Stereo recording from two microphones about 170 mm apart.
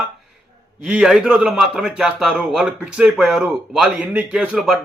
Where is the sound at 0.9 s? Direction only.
5° right (ahead or behind).